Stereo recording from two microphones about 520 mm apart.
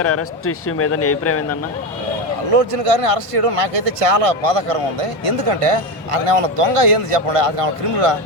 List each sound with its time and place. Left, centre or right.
0.0 s speech: left
2.5 s speech: right